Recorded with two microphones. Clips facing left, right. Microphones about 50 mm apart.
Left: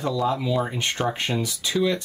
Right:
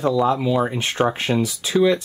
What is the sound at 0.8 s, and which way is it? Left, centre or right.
Speech, centre.